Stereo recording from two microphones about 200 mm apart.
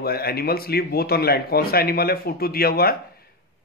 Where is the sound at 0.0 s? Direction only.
50° left (ahead or behind).